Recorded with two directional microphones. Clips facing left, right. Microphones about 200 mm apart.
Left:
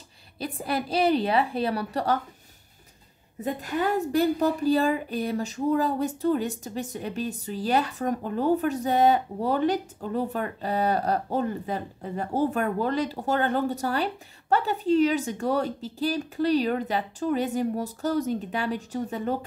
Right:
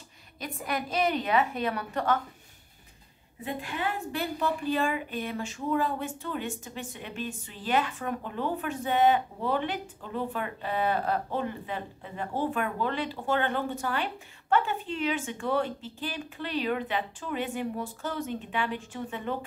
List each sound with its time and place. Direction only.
0.4 s a woman's voice: 30° left (ahead or behind)
3.3 s a woman's voice: 40° left (ahead or behind)